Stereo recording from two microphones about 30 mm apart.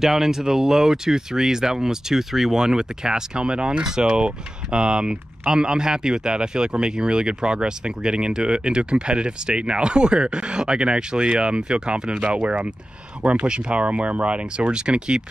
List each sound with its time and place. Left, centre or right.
0.0 s speech: centre
3.3 s speech: right
3.8 s speech: right